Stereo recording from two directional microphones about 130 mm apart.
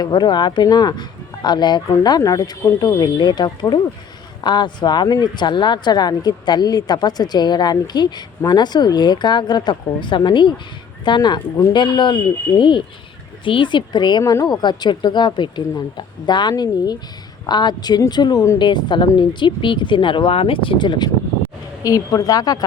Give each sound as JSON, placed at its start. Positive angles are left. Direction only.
{"t": 0.0, "sound": "a woman's voice", "side_deg": 35}